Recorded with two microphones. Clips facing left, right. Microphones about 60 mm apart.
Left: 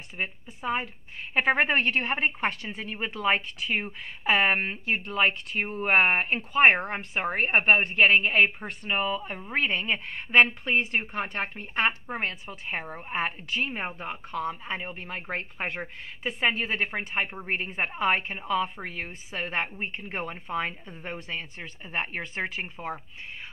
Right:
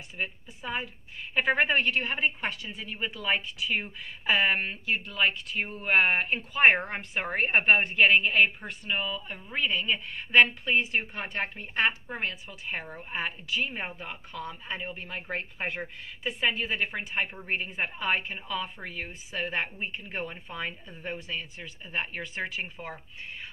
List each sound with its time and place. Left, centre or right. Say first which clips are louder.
0.6 s a woman's voice: left 5 dB; left
5.1 s a woman's voice: left 4 dB; left
10.3 s a woman's voice: left 1 dB; left
11.5 s a woman's voice: left 1 dB; left
13.7 s a woman's voice: left 3 dB; left
14.0 s a woman's voice: left 6 dB; left
19.3 s a woman's voice: left 1 dB; left